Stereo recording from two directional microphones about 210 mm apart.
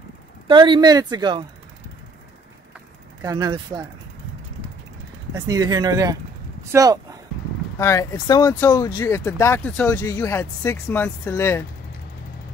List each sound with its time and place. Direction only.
0.5 s speech: 20° right (ahead or behind)
3.2 s speech: 20° right (ahead or behind)
5.5 s speech: 20° right (ahead or behind)
7.8 s speech: 15° left (ahead or behind)